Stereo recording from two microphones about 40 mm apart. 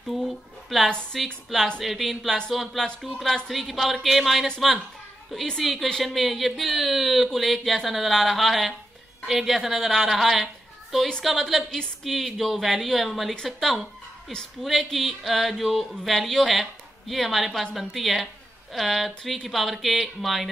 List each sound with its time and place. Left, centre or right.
0.0 s a sound: centre
1.1 s speech: centre
5.6 s a woman's voice: centre